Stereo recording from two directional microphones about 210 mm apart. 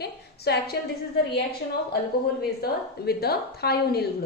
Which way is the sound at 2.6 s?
50° left (ahead or behind).